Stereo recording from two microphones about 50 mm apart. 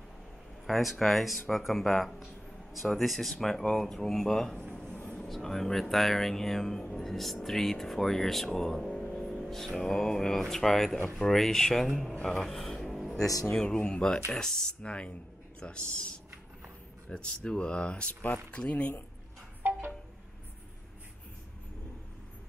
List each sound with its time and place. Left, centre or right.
0.7 s speech: centre
8.5 s vehicle: centre
9.3 s music: centre
10.5 s speech: centre
12.2 s speech: centre
12.4 s music: centre
13.6 s speech: centre
14.8 s speech: left